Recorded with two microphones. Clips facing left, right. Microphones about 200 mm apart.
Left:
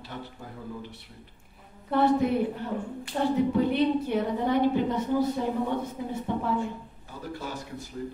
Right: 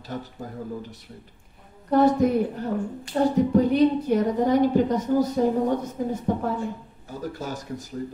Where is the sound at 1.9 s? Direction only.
40° right (ahead or behind).